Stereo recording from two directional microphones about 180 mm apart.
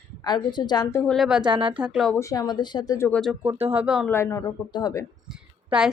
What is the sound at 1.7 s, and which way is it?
Speech, 5° right (ahead or behind).